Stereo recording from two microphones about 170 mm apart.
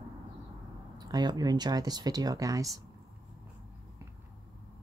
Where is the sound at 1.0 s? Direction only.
25° right (ahead or behind).